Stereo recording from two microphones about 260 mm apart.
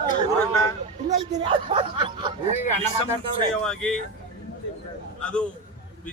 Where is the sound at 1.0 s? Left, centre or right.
Right.